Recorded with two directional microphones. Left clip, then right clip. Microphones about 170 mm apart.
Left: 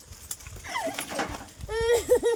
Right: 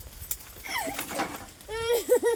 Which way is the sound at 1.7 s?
5° right (ahead or behind).